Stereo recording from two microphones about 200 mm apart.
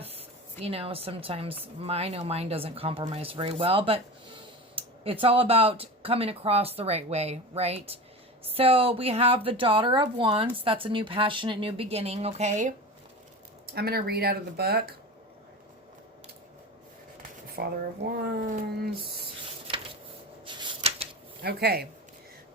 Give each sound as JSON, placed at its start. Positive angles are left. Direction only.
{"t": 0.0, "sound": "a woman's voice", "side_deg": -30}
{"t": 5.2, "sound": "a woman's voice", "side_deg": -30}
{"t": 13.7, "sound": "speech", "side_deg": -50}
{"t": 17.6, "sound": "speech", "side_deg": -55}
{"t": 20.4, "sound": "shuffling cards", "side_deg": -25}
{"t": 21.4, "sound": "speech", "side_deg": -50}